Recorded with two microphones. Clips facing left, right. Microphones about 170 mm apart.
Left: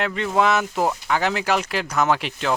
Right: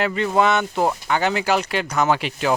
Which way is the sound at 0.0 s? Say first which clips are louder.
Right 2 dB; centre (ahead or behind).